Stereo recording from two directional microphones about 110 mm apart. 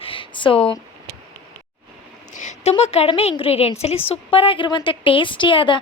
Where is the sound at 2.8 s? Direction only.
70° left (ahead or behind); by 5.8 s 50° left (ahead or behind).